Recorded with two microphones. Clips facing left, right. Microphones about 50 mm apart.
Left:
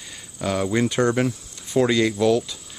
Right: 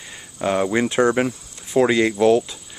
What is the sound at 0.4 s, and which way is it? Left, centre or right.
Speech, right.